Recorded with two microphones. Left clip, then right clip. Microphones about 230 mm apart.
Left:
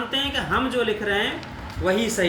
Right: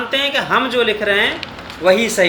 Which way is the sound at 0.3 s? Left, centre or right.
Centre.